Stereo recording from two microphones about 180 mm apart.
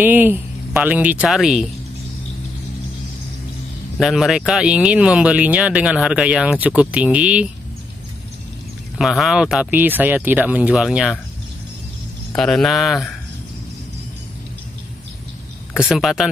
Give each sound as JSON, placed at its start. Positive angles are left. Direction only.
{"t": 0.0, "sound": "speech", "side_deg": -10}
{"t": 4.0, "sound": "speech", "side_deg": 0}
{"t": 8.9, "sound": "speech", "side_deg": 0}
{"t": 12.4, "sound": "speech", "side_deg": 5}
{"t": 15.9, "sound": "speech", "side_deg": 0}